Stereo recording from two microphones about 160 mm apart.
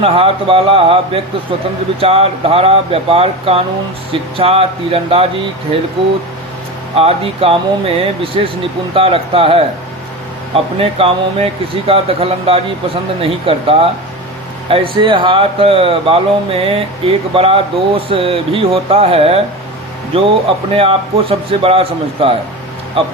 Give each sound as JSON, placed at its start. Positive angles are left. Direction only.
{"t": 0.0, "sound": "speech", "side_deg": -35}
{"t": 6.9, "sound": "speech", "side_deg": -35}
{"t": 10.8, "sound": "speech", "side_deg": -35}
{"t": 20.7, "sound": "speech", "side_deg": -35}